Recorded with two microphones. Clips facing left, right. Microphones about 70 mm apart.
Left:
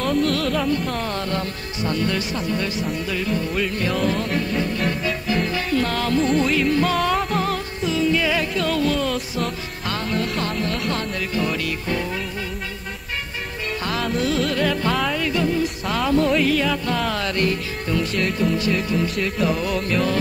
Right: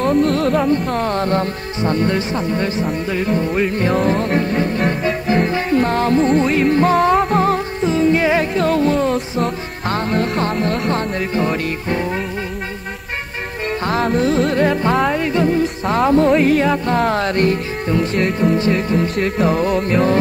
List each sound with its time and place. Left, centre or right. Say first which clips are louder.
0.0 s music: right 6 dB; right
13.8 s music: right 6 dB; right